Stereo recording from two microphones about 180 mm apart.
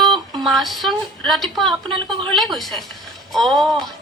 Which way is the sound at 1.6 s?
30° right (ahead or behind).